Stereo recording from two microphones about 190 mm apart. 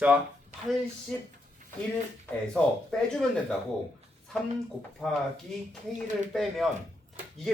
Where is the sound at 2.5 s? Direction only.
5° left (ahead or behind).